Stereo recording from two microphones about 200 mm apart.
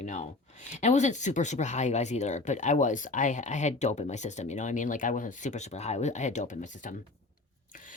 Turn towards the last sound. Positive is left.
turn(degrees=40)  # may be behind; listen again after turning